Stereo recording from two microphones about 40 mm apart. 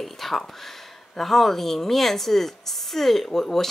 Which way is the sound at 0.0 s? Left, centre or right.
Centre.